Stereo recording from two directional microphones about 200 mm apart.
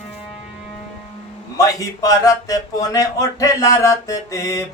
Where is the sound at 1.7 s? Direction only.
15° left (ahead or behind).